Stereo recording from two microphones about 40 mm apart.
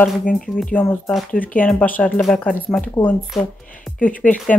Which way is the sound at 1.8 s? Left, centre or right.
Left.